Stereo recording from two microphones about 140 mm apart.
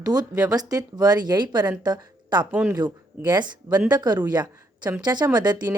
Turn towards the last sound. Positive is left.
turn(degrees=-30)  # may be behind; listen again after turning